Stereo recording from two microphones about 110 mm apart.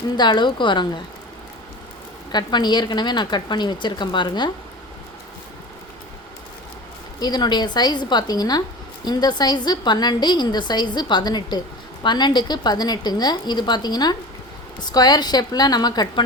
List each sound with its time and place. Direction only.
0.2 s speech: 45° left (ahead or behind)
2.3 s speech: 40° left (ahead or behind)
7.2 s a woman's voice: 40° left (ahead or behind)